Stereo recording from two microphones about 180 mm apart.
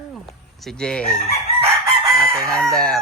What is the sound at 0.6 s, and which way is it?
Speech, 5° left (ahead or behind).